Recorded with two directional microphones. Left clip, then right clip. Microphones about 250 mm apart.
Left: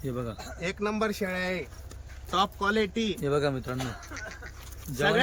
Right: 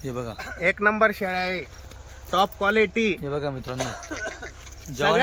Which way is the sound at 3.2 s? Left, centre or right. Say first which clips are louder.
Left 2 dB; centre.